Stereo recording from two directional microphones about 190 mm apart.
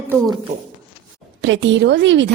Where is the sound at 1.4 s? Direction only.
70° right (ahead or behind).